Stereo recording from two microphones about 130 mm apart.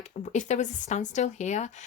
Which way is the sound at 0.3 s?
65° left (ahead or behind).